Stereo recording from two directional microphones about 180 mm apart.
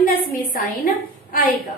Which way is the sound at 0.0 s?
50° left (ahead or behind).